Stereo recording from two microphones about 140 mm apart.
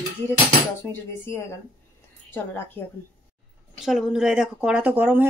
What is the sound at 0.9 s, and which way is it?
Speech, 15° left (ahead or behind).